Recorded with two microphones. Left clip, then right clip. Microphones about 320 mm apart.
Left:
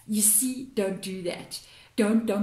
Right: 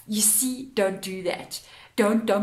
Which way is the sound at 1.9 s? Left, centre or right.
Right.